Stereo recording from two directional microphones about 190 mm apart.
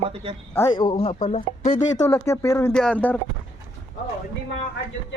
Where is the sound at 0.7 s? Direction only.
25° left (ahead or behind).